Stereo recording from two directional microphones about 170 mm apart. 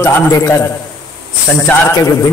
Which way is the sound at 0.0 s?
15° left (ahead or behind).